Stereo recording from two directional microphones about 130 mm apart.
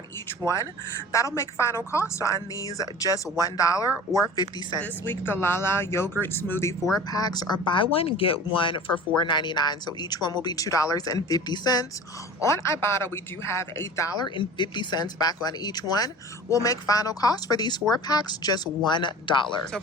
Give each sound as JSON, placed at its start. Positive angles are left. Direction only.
{"t": 0.4, "sound": "a woman's voice", "side_deg": 20}
{"t": 4.8, "sound": "speech", "side_deg": 15}
{"t": 7.1, "sound": "a woman's voice", "side_deg": 30}
{"t": 14.3, "sound": "a woman's voice", "side_deg": 35}